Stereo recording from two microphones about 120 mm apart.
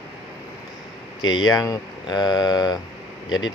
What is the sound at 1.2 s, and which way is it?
Speech, 35° left (ahead or behind).